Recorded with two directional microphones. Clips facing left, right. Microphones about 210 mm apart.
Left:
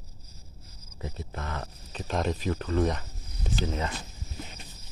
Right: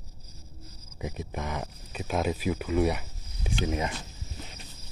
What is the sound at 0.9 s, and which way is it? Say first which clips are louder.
Speech: right 3 dB; 15° right (ahead or behind).